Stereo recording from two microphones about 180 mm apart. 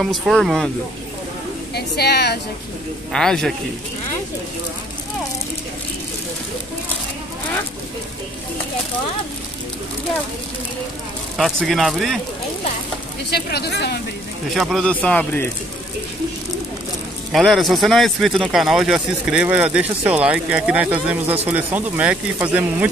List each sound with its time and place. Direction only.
0.0 s speech: centre (ahead or behind)
1.8 s speech: 65° left (ahead or behind)
3.1 s speech: 5° left (ahead or behind)
11.3 s speech: centre (ahead or behind)
13.3 s speech: 65° left (ahead or behind)
14.5 s speech: centre (ahead or behind)
17.3 s speech: centre (ahead or behind)